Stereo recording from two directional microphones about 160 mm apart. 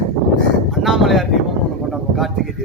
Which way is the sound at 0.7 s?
Centre (ahead or behind).